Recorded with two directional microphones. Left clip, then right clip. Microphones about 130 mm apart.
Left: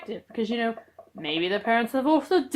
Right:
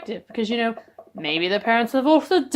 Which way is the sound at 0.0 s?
35° right (ahead or behind).